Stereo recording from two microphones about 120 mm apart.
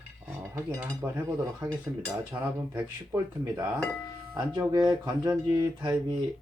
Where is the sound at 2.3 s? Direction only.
20° right (ahead or behind).